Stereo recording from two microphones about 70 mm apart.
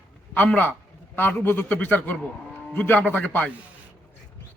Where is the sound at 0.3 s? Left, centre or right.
Centre.